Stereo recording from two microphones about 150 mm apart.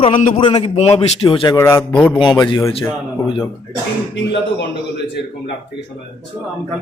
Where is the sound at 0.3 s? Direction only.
40° left (ahead or behind).